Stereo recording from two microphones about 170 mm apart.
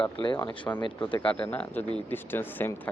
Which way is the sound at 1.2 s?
5° left (ahead or behind).